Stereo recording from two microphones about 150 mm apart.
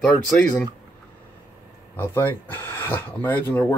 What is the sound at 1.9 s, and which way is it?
Speech, 15° left (ahead or behind).